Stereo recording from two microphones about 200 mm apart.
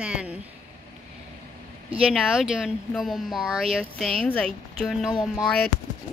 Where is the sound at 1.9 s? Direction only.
Centre (ahead or behind).